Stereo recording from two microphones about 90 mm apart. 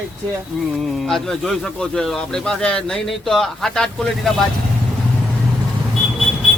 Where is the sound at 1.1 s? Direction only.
5° left (ahead or behind).